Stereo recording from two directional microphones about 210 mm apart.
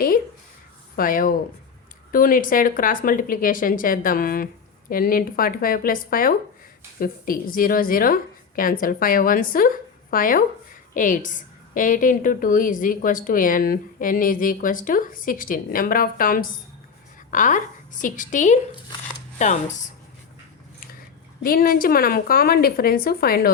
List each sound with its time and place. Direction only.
0.9 s a woman's voice: 40° left (ahead or behind)
21.4 s a woman's voice: 45° left (ahead or behind)